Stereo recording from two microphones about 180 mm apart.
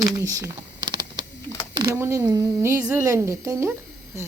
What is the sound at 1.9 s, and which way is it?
Speech, 15° right (ahead or behind).